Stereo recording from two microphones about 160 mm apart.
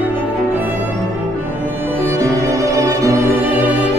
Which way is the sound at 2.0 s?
20° right (ahead or behind).